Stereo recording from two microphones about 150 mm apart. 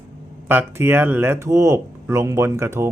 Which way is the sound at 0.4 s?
15° right (ahead or behind).